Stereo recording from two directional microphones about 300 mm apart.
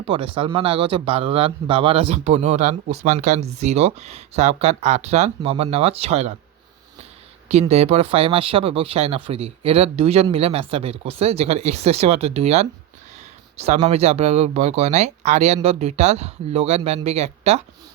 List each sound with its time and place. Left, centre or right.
0.0 s speech: centre
7.4 s speech: right